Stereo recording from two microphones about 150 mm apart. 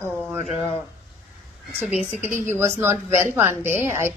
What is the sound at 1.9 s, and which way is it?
Speech, 10° right (ahead or behind).